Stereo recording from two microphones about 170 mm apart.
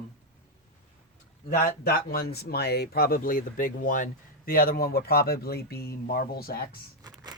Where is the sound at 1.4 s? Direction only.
60° left (ahead or behind).